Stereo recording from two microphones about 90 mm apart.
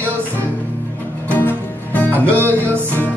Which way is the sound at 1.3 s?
20° left (ahead or behind).